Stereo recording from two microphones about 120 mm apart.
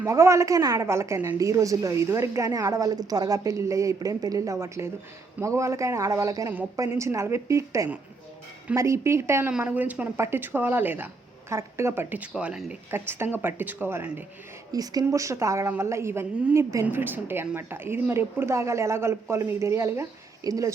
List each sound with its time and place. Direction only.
0.0 s a woman's voice: 25° right (ahead or behind)
9.5 s speech: 10° right (ahead or behind)
12.9 s speech: 20° right (ahead or behind)
14.7 s a woman's voice: 30° right (ahead or behind)